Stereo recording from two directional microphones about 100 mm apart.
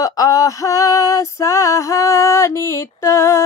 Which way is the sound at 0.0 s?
35° left (ahead or behind).